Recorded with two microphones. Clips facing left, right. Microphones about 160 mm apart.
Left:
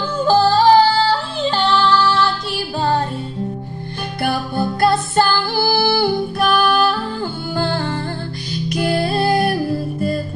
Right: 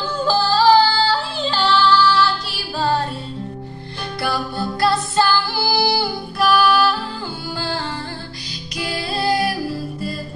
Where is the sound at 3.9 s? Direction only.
50° left (ahead or behind).